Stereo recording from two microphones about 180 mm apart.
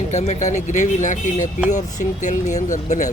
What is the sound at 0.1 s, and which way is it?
Speech, 40° left (ahead or behind).